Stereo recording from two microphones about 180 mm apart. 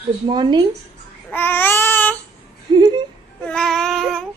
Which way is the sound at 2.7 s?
25° right (ahead or behind).